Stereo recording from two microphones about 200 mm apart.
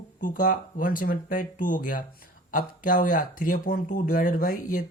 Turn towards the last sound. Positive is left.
turn(degrees=45)  # may be behind; listen again after turning